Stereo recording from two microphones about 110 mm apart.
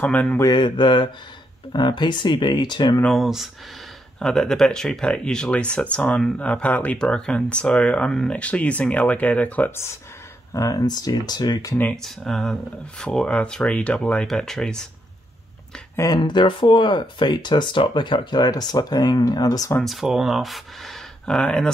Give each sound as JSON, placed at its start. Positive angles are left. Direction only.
{"t": 0.0, "sound": "speech", "side_deg": 15}
{"t": 0.4, "sound": "speech", "side_deg": 45}
{"t": 3.1, "sound": "speech", "side_deg": 0}
{"t": 10.5, "sound": "speech", "side_deg": 30}
{"t": 11.7, "sound": "speech", "side_deg": 15}
{"t": 12.0, "sound": "speech", "side_deg": 5}
{"t": 16.0, "sound": "speech", "side_deg": 40}
{"t": 19.8, "sound": "speech", "side_deg": 0}